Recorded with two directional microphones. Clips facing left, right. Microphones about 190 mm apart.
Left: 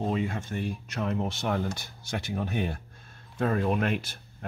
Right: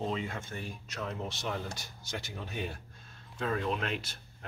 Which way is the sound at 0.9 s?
60° left (ahead or behind).